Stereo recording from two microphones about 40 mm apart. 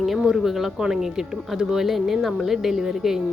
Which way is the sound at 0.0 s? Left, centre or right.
Centre.